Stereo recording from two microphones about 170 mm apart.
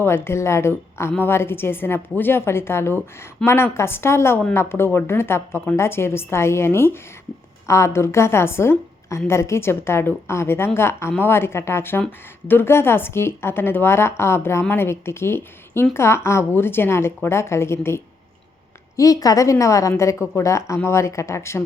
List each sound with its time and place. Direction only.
0.0 s speech: 15° left (ahead or behind)